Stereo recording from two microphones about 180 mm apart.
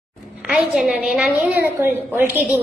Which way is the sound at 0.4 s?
5° right (ahead or behind).